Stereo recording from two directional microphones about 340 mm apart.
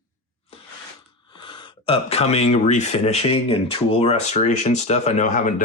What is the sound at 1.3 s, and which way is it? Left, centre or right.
Speech, centre.